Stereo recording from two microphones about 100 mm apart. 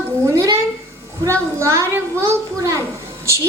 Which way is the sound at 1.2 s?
25° right (ahead or behind).